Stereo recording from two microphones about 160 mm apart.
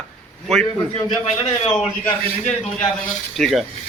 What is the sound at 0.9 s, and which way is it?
Speech, 40° left (ahead or behind).